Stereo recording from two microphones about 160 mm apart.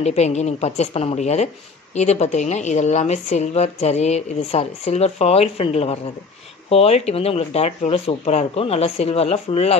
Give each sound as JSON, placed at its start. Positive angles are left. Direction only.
{"t": 0.0, "sound": "speech", "side_deg": 45}